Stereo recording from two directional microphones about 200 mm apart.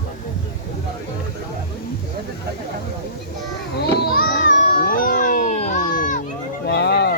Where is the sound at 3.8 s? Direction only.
50° left (ahead or behind).